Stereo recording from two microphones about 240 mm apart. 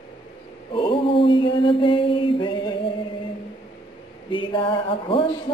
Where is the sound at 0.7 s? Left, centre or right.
Left.